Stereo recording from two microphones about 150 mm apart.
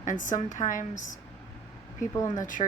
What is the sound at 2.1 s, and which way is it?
Speech, 25° left (ahead or behind).